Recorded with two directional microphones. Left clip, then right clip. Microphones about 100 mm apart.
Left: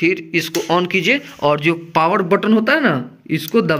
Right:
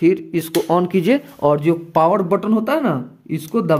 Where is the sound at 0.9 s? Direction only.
85° right.